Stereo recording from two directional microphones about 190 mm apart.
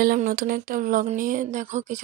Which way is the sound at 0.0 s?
45° right (ahead or behind).